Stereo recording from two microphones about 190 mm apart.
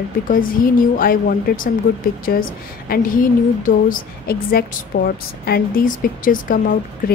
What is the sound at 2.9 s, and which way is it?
A woman's voice, 45° left (ahead or behind).